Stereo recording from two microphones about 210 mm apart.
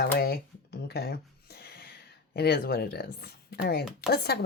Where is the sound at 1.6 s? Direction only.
50° left (ahead or behind).